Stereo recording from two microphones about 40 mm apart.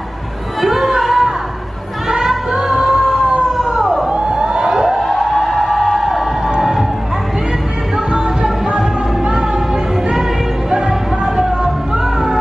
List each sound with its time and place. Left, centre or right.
0.7 s a sound: centre
2.0 s music: centre
3.2 s emergency vehicle: right
3.5 s emergency vehicle: centre
4.1 s a sound: right
4.7 s a sound: centre
5.3 s music: centre
8.1 s music: centre
10.7 s music: centre